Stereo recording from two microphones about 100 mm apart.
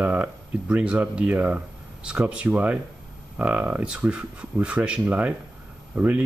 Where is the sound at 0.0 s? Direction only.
15° right (ahead or behind).